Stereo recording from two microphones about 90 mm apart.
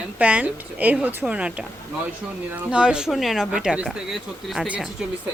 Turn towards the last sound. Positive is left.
turn(degrees=-10)  # may be behind; listen again after turning